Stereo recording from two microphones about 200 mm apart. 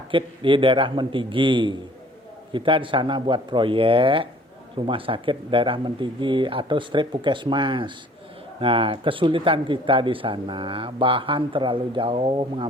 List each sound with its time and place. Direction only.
0.1 s speech: 25° right (ahead or behind)